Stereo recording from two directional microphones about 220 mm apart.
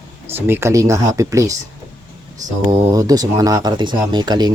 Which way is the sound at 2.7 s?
15° right (ahead or behind).